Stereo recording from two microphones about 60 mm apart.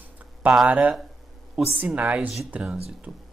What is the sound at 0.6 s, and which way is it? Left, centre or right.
Speech, right.